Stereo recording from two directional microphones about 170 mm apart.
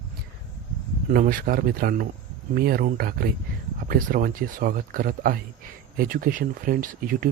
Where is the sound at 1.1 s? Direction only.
55° right (ahead or behind).